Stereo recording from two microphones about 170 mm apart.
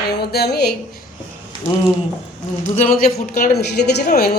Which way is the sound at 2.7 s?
50° left (ahead or behind).